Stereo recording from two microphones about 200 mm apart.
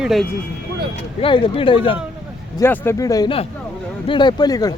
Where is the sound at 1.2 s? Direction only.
25° left (ahead or behind).